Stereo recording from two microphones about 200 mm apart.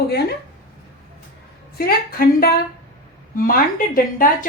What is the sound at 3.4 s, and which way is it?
Speech, 45° left (ahead or behind).